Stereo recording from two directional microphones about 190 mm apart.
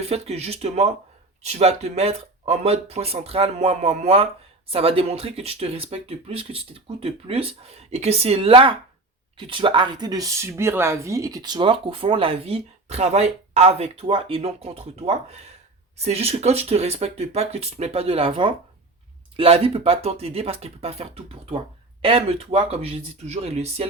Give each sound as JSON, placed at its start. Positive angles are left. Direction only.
{"t": 0.0, "sound": "speech", "side_deg": -35}